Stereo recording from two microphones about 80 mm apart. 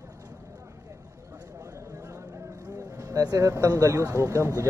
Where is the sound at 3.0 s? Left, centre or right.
Right.